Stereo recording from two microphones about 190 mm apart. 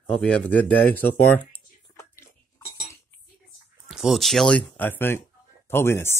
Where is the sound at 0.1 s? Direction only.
5° left (ahead or behind).